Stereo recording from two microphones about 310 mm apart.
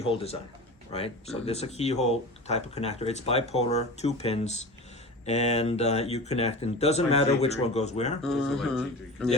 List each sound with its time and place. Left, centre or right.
0.0 s speech: centre
8.2 s speech: centre